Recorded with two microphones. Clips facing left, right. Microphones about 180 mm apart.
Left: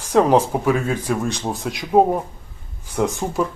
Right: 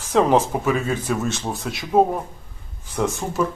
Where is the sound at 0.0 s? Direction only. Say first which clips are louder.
Left 2 dB; 15° left (ahead or behind).